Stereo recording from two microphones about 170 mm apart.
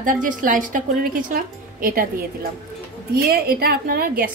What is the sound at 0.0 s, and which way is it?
A woman's voice, 50° right (ahead or behind).